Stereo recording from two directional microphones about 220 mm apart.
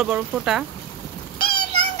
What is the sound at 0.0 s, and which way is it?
Speech, 5° right (ahead or behind).